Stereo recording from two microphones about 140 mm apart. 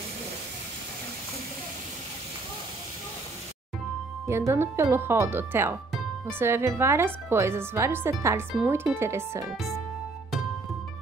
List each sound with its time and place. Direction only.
4.3 s speech: 20° right (ahead or behind)